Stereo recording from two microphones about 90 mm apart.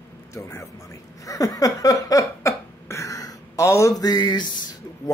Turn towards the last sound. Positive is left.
turn(degrees=55)  # may be behind; listen again after turning